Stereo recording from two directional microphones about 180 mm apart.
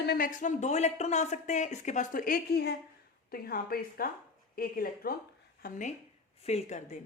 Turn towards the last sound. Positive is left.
turn(degrees=40)  # may be behind; listen again after turning